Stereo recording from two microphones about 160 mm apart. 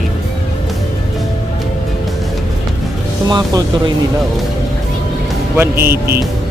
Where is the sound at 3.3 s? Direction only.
25° right (ahead or behind).